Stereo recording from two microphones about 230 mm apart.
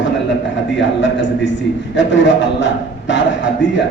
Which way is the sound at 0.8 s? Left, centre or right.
Left.